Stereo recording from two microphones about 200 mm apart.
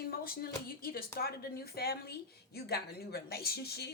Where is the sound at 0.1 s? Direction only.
50° left (ahead or behind).